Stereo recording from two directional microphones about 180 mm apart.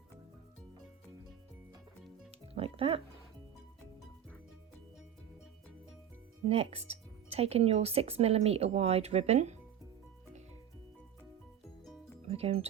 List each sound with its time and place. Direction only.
2.6 s speech: 30° right (ahead or behind)
6.4 s speech: 35° right (ahead or behind)
12.3 s speech: 35° right (ahead or behind)